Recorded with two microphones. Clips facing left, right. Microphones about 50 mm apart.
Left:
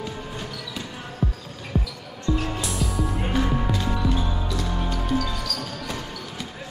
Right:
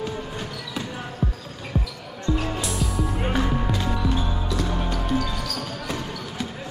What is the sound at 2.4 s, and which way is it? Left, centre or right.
Music, centre.